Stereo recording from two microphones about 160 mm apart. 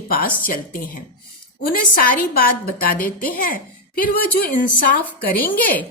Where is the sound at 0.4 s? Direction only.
65° left (ahead or behind).